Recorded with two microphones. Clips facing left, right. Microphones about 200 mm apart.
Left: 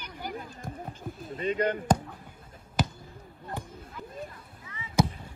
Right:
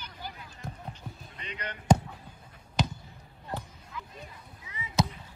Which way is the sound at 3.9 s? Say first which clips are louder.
Left 4 dB; 45° left (ahead or behind).